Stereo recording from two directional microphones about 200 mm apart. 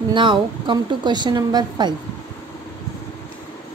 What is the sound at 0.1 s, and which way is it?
A woman's voice, 25° right (ahead or behind).